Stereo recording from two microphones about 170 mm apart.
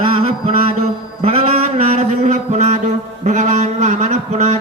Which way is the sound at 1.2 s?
35° right (ahead or behind).